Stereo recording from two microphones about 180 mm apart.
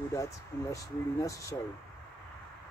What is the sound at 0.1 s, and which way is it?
Speech, 15° left (ahead or behind).